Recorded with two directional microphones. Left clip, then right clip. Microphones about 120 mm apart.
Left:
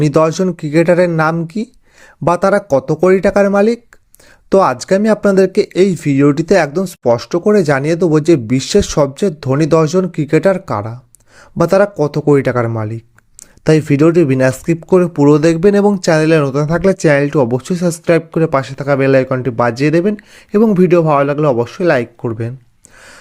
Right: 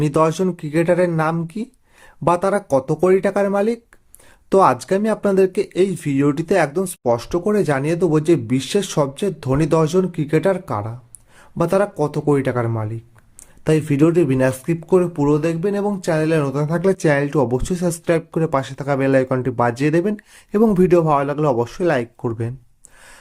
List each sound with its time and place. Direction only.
0.0 s speech: 35° left (ahead or behind); by 16.4 s 65° left (ahead or behind)
16.4 s speech: 40° left (ahead or behind)